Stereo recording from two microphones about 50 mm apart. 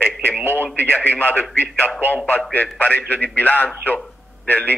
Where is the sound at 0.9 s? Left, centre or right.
Left.